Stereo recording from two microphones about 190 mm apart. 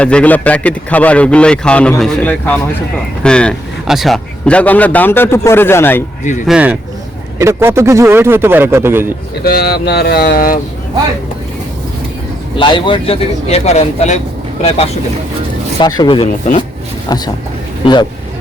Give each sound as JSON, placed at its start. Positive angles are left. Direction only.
{"t": 0.0, "sound": "speech", "side_deg": 5}
{"t": 6.5, "sound": "a man's voice", "side_deg": -5}
{"t": 9.4, "sound": "speech", "side_deg": 55}
{"t": 12.5, "sound": "speech", "side_deg": 25}
{"t": 15.8, "sound": "speech", "side_deg": 20}